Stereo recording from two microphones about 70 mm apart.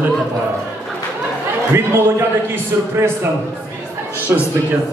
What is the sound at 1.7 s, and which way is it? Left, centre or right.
Speech, right.